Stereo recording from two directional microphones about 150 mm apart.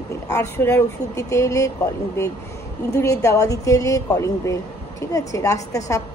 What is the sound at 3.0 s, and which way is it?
A woman's voice, 20° left (ahead or behind).